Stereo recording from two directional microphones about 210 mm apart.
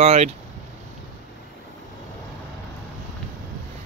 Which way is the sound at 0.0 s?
30° right (ahead or behind).